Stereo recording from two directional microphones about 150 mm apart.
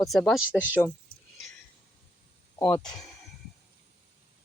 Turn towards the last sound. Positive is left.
turn(degrees=5)  # may be behind; listen again after turning